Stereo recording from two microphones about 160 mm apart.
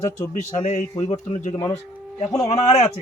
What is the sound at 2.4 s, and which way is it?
Speech, 45° left (ahead or behind).